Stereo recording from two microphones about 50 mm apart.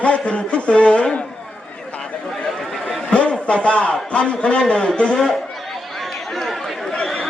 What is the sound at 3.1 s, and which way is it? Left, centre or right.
A man's voice, left.